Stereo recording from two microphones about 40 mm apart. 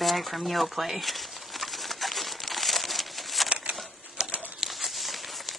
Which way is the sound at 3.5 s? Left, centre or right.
Right.